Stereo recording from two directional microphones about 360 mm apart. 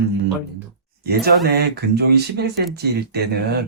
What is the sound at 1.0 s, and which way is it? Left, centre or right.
Speech, right.